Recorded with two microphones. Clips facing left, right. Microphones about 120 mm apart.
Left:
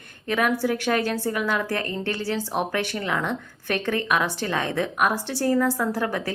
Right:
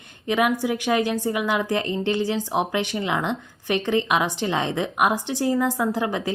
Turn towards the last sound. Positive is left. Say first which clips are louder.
# right 2 dB
turn(degrees=-15)  # may be behind; listen again after turning